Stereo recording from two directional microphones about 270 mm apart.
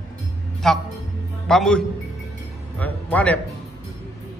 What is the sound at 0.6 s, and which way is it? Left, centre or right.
A man's voice, centre.